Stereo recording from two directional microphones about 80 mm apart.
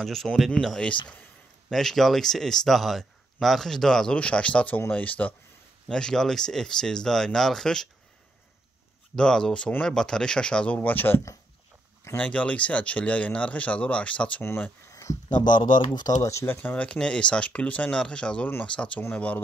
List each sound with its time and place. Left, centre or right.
0.0 s speech: centre
5.9 s speech: centre
9.1 s speech: centre
12.2 s speech: centre
14.4 s speech: left
15.3 s speech: left
16.2 s speech: left
16.5 s speech: centre